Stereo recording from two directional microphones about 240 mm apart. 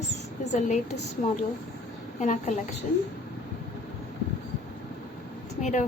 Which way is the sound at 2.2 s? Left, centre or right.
Left.